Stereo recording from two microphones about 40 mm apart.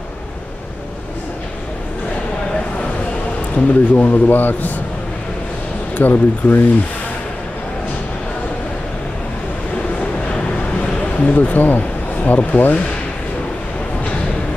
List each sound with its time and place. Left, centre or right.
3.5 s a man's voice: left
5.9 s a man's voice: left
10.8 s a sound: left
11.3 s a man's voice: left